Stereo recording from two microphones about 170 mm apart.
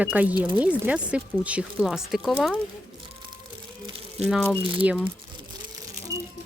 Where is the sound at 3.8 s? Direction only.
35° right (ahead or behind).